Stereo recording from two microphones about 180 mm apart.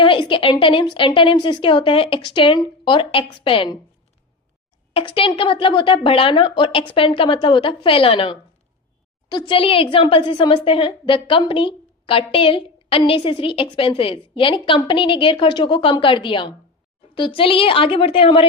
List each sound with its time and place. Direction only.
0.0 s a woman's voice: 30° left (ahead or behind)
4.9 s a woman's voice: 30° left (ahead or behind)